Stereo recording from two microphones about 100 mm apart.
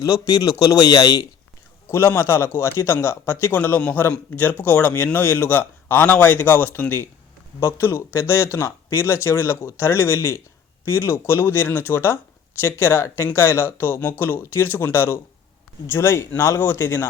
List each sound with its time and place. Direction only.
0.5 s speech: 35° left (ahead or behind)
1.9 s a man's voice: 25° left (ahead or behind)